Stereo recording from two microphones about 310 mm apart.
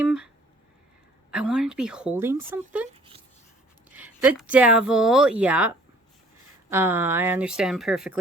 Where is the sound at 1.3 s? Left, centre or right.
Centre.